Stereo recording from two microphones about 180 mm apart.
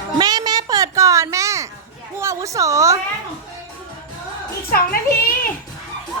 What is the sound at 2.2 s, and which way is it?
Speech, 15° right (ahead or behind).